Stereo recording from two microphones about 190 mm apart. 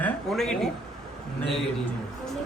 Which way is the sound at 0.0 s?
Centre (ahead or behind).